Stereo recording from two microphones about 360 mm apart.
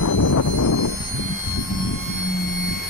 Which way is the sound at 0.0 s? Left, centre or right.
Left.